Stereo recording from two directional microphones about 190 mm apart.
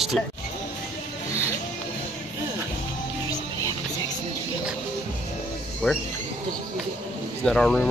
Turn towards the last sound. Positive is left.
turn(degrees=5)  # may be behind; listen again after turning